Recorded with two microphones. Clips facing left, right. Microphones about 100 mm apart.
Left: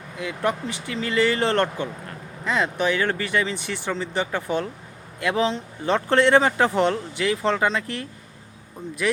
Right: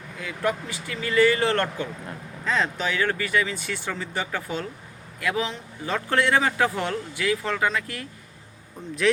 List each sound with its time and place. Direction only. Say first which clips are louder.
0.2 s speech: left 2 dB; 20° left (ahead or behind)
9.0 s speech: right 2 dB; 5° left (ahead or behind)